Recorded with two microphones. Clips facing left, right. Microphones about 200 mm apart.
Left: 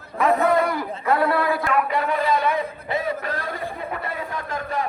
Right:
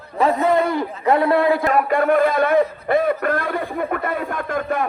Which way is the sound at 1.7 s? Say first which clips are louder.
Right 5 dB; 45° right (ahead or behind).